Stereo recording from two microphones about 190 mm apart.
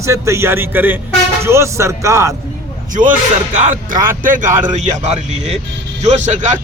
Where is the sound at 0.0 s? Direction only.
15° right (ahead or behind).